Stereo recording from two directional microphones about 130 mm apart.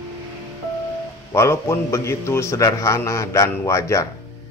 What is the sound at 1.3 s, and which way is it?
Speech, 20° left (ahead or behind).